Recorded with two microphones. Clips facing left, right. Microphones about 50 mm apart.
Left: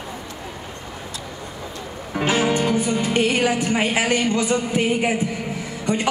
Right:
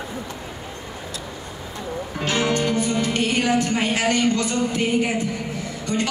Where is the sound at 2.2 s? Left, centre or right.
Centre.